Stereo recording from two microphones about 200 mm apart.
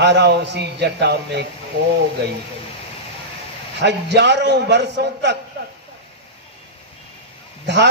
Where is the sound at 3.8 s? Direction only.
60° right (ahead or behind).